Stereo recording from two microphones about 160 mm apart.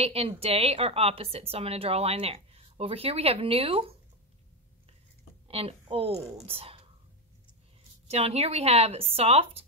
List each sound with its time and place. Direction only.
0.0 s a woman's voice: 40° right (ahead or behind)
5.5 s a woman's voice: 40° right (ahead or behind)
8.1 s a woman's voice: 40° right (ahead or behind)